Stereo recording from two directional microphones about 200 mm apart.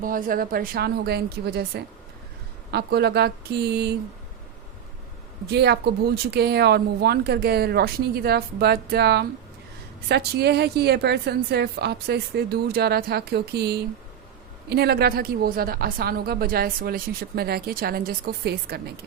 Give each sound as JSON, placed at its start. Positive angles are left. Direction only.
{"t": 0.0, "sound": "a woman's voice", "side_deg": -45}
{"t": 5.5, "sound": "a woman's voice", "side_deg": -55}